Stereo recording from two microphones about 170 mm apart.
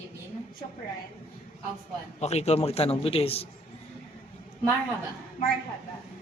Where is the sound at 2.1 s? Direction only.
40° left (ahead or behind).